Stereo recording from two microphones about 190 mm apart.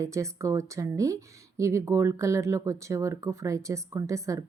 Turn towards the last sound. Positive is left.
turn(degrees=-15)  # may be behind; listen again after turning